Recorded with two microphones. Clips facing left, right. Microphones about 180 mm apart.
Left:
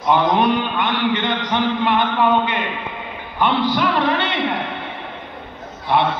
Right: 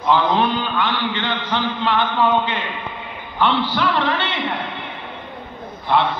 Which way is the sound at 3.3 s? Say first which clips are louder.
Left 1 dB; 15° left (ahead or behind).